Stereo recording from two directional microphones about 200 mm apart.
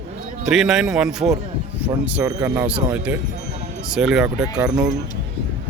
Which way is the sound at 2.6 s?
5° right (ahead or behind).